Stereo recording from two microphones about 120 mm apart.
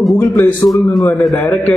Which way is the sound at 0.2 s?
15° left (ahead or behind).